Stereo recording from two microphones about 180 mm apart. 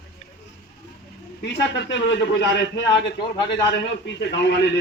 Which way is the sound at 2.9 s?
25° left (ahead or behind).